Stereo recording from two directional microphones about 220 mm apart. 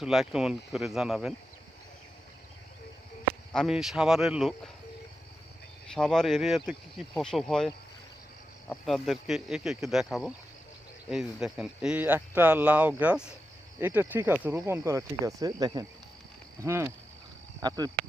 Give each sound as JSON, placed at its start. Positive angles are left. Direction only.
{"t": 0.0, "sound": "speech", "side_deg": 0}
{"t": 3.5, "sound": "speech", "side_deg": 0}
{"t": 5.9, "sound": "speech", "side_deg": 0}
{"t": 8.7, "sound": "speech", "side_deg": 0}